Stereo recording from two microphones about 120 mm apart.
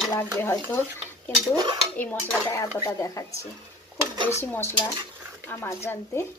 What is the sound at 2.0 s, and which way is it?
Dishes, 15° left (ahead or behind).